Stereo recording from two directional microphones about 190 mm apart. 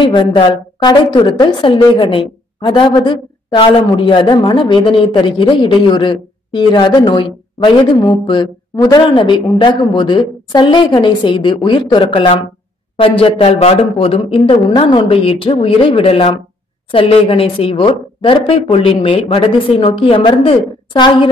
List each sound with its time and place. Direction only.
0.0 s a woman's voice: 25° left (ahead or behind)